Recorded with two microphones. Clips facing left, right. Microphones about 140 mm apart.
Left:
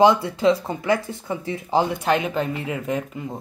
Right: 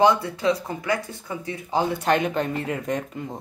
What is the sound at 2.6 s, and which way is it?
Speech, 5° left (ahead or behind).